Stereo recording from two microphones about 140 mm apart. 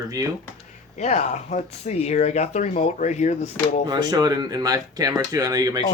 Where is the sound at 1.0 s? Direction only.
55° left (ahead or behind).